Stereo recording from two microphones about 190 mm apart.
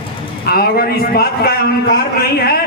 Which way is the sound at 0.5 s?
55° left (ahead or behind).